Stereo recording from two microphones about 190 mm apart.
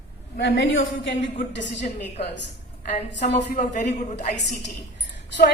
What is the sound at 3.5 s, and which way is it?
Speech, 40° left (ahead or behind).